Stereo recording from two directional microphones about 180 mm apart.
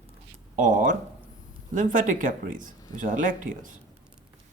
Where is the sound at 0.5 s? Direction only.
45° right (ahead or behind).